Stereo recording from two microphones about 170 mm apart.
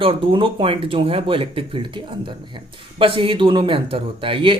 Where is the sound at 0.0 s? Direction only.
30° right (ahead or behind).